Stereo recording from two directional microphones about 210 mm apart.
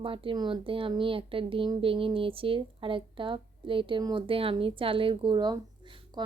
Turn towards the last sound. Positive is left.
turn(degrees=-20)  # may be behind; listen again after turning